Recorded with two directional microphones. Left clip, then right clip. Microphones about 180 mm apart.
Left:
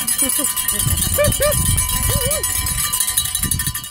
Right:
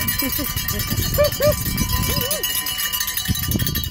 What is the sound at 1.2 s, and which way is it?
Speech, 15° right (ahead or behind).